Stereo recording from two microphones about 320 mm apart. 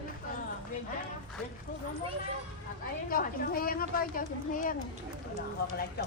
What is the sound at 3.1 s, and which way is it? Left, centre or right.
Speech, left.